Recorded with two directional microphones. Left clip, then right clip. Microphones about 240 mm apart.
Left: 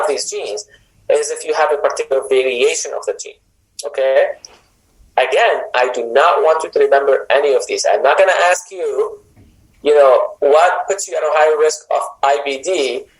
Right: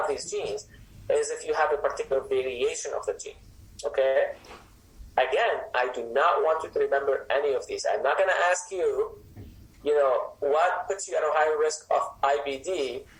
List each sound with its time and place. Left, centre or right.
0.0 s a woman's voice: left